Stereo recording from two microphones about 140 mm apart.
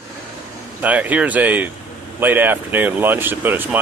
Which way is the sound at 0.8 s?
10° right (ahead or behind).